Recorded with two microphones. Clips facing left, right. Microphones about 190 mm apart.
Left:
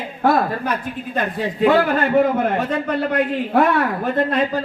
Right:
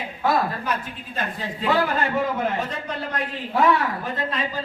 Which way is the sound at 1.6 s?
60° left (ahead or behind).